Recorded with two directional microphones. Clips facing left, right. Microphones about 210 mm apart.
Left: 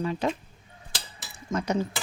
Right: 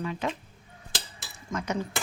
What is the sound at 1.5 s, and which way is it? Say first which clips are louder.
Speech: left 4 dB; 25° left (ahead or behind).